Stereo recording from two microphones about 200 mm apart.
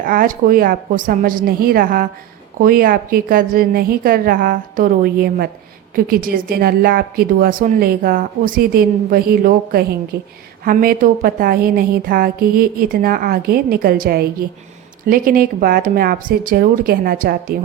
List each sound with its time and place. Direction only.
0.0 s a woman's voice: 45° right (ahead or behind)